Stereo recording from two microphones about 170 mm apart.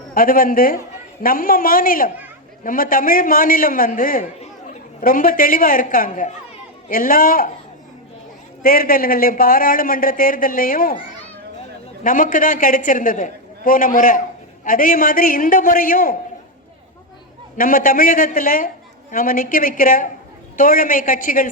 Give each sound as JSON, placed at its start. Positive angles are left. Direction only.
{"t": 0.1, "sound": "a man's voice", "side_deg": 55}
{"t": 8.6, "sound": "a man's voice", "side_deg": 60}
{"t": 12.0, "sound": "a man's voice", "side_deg": 55}
{"t": 17.6, "sound": "a man's voice", "side_deg": 55}